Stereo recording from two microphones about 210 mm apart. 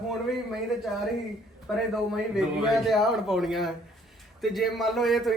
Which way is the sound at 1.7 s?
Centre (ahead or behind).